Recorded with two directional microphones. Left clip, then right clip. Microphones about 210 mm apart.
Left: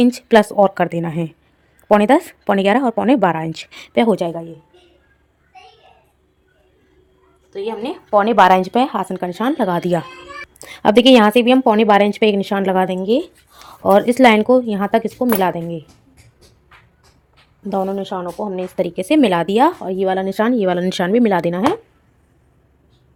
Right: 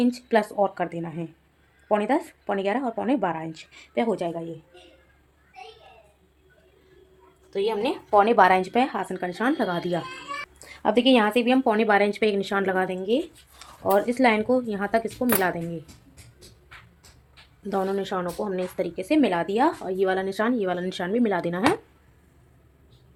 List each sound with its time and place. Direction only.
0.0 s speech: 45° left (ahead or behind)
7.5 s speech: 25° left (ahead or behind)
17.6 s speech: 25° left (ahead or behind)
18.8 s speech: 45° left (ahead or behind)